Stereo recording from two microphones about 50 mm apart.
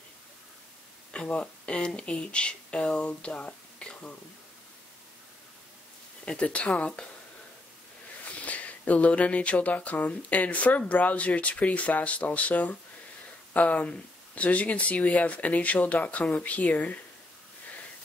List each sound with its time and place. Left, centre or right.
1.1 s speech: left
6.2 s speech: left
8.5 s speech: left